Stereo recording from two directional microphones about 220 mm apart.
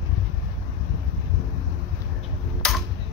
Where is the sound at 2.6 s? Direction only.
5° left (ahead or behind).